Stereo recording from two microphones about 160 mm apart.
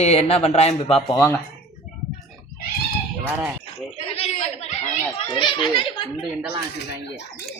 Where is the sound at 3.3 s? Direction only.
10° right (ahead or behind).